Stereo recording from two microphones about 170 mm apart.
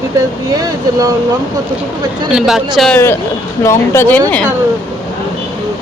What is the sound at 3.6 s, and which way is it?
Speech, 15° left (ahead or behind).